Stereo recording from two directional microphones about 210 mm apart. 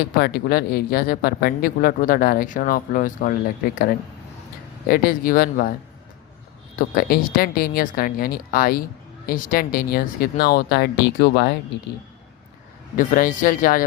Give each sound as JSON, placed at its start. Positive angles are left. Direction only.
{"t": 0.2, "sound": "speech", "side_deg": 45}
{"t": 6.7, "sound": "speech", "side_deg": 40}
{"t": 13.0, "sound": "speech", "side_deg": 40}